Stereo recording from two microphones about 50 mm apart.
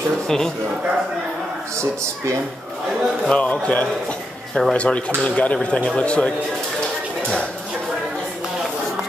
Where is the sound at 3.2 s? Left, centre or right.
Centre.